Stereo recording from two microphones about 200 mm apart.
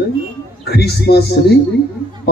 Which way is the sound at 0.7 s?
55° left (ahead or behind).